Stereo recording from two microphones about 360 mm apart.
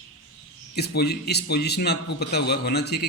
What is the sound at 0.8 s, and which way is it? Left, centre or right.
A man's voice, left.